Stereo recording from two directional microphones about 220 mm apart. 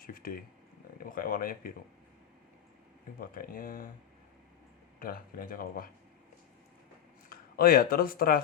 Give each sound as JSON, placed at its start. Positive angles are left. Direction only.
{"t": 0.0, "sound": "a sound", "side_deg": 40}
{"t": 0.9, "sound": "speech", "side_deg": 40}
{"t": 3.2, "sound": "speech", "side_deg": 40}
{"t": 4.9, "sound": "speech", "side_deg": 40}
{"t": 7.3, "sound": "speech", "side_deg": 45}